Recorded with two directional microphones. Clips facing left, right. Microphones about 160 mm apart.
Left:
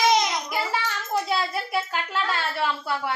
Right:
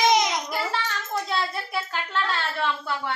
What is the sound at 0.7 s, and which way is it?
A child's voice, 10° left (ahead or behind).